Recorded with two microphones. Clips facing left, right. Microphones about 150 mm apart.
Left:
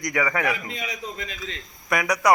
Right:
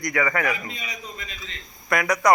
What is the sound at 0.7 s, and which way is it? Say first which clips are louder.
Speech: left 4 dB; 90° left.